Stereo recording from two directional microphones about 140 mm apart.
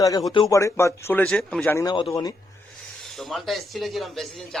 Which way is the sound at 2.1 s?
25° left (ahead or behind).